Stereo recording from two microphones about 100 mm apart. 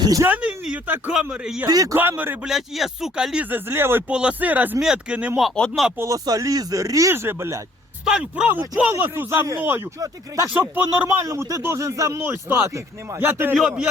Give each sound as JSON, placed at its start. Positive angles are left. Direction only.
{"t": 0.0, "sound": "speech", "side_deg": -35}
{"t": 0.3, "sound": "a man's voice", "side_deg": -15}
{"t": 1.6, "sound": "speech", "side_deg": -40}
{"t": 2.0, "sound": "a man's voice", "side_deg": -20}
{"t": 2.5, "sound": "speech", "side_deg": 0}
{"t": 3.5, "sound": "speech", "side_deg": -20}
{"t": 4.1, "sound": "a man's voice", "side_deg": -10}
{"t": 5.5, "sound": "speech", "side_deg": 10}
{"t": 6.0, "sound": "speech", "side_deg": -35}
{"t": 8.0, "sound": "speech", "side_deg": -10}
{"t": 10.5, "sound": "speech", "side_deg": -20}
{"t": 11.3, "sound": "speech", "side_deg": -35}